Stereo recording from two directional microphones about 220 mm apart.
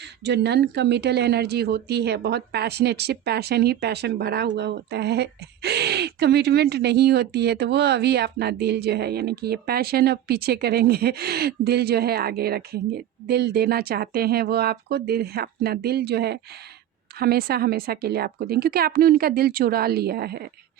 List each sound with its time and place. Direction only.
0.0 s speech: 50° right (ahead or behind)